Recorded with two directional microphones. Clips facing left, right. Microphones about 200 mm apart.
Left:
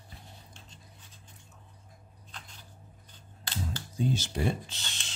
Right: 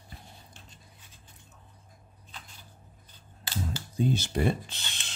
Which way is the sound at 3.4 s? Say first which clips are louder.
Right 2 dB; 5° right (ahead or behind).